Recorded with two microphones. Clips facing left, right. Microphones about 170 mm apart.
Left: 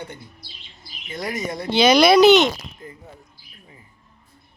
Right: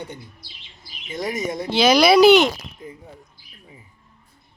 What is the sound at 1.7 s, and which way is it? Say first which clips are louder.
Speech: left 1 dB; centre (ahead or behind).